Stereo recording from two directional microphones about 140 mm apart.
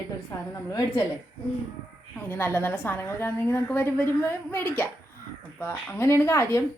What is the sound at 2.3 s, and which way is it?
A woman's voice, 15° left (ahead or behind).